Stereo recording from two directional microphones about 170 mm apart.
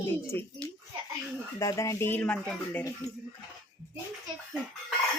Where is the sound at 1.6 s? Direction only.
20° left (ahead or behind).